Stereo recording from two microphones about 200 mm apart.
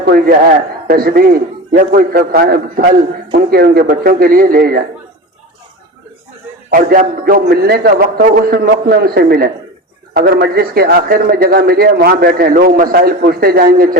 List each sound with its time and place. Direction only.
0.0 s a man's voice: 50° right (ahead or behind)
6.7 s a man's voice: 45° right (ahead or behind)